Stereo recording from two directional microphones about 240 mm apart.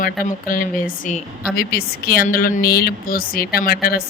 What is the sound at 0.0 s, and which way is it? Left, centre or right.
Speech, left.